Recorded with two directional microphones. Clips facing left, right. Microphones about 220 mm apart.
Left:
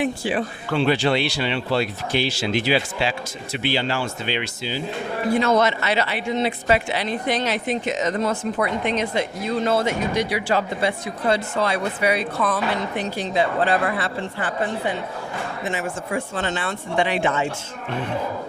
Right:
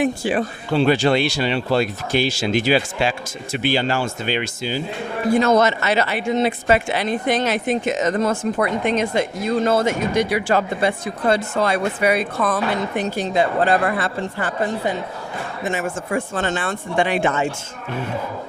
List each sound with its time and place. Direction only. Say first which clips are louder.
0.0 s speech: right 3 dB; 45° right (ahead or behind)